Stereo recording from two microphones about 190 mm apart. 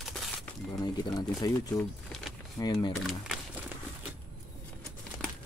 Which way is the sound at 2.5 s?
20° left (ahead or behind).